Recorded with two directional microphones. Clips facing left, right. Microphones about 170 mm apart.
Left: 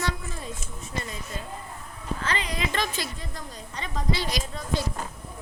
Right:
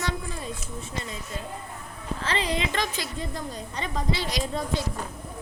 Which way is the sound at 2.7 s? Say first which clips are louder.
Even; 15° right (ahead or behind).